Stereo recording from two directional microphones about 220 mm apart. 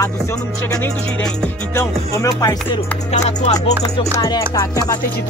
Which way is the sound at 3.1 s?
30° left (ahead or behind).